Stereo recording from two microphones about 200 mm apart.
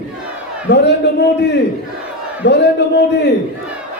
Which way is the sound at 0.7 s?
60° left (ahead or behind).